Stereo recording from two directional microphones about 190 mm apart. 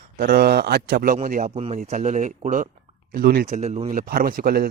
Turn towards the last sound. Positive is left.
turn(degrees=-50)  # may be behind; listen again after turning